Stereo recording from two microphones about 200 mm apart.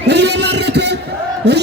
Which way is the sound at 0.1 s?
60° right (ahead or behind).